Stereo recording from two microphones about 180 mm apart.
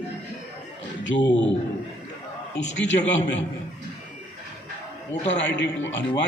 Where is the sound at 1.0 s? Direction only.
85° left.